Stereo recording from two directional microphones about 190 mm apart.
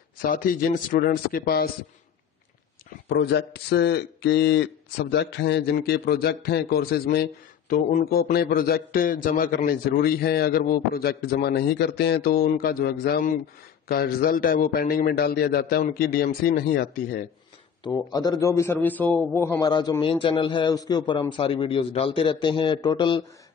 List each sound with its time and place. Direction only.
0.2 s a man's voice: 45° left (ahead or behind)
3.1 s a man's voice: 60° left (ahead or behind)
17.8 s a man's voice: 20° left (ahead or behind)
19.7 s a man's voice: 20° left (ahead or behind)